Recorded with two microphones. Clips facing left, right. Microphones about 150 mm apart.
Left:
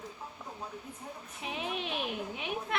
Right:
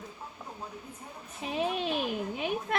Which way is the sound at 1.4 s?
40° right (ahead or behind).